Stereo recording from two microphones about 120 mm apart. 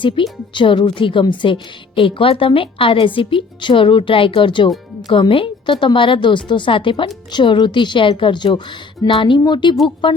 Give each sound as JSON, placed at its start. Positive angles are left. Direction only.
{"t": 0.0, "sound": "a woman's voice", "side_deg": 45}